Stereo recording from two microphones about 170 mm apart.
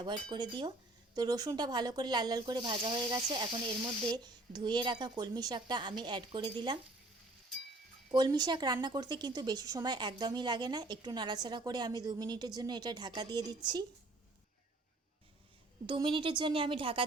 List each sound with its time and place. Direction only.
0.0 s a woman's voice: 25° right (ahead or behind)
8.1 s a woman's voice: 25° right (ahead or behind)
15.9 s speech: 30° right (ahead or behind)